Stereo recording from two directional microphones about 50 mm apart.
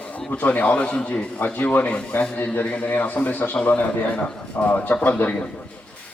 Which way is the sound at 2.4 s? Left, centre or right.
Left.